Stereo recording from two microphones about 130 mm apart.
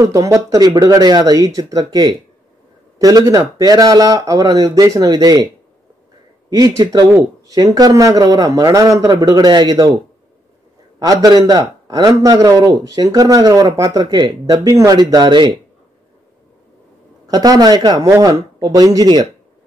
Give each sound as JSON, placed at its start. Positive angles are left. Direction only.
{"t": 0.0, "sound": "a man's voice", "side_deg": -25}
{"t": 6.5, "sound": "a man's voice", "side_deg": -30}
{"t": 11.0, "sound": "a man's voice", "side_deg": -30}
{"t": 17.3, "sound": "a man's voice", "side_deg": -30}